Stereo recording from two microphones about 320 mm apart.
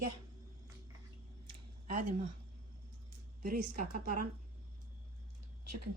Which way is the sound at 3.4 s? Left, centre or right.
Right.